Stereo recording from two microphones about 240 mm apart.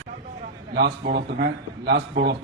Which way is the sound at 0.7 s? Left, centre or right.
Right.